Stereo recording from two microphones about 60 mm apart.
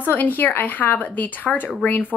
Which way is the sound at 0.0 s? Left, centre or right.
Left.